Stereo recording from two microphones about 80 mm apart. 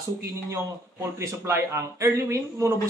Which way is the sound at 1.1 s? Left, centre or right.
Right.